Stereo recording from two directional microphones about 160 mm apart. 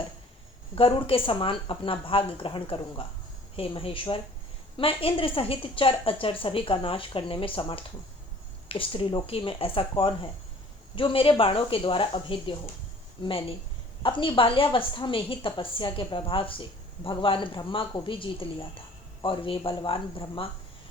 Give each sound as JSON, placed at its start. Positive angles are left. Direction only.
{"t": 0.8, "sound": "a woman's voice", "side_deg": 35}
{"t": 14.0, "sound": "a woman's voice", "side_deg": 30}